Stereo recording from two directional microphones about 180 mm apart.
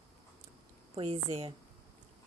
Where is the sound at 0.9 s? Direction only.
35° right (ahead or behind).